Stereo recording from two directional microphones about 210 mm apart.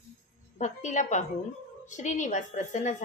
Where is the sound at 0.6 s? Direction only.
35° left (ahead or behind).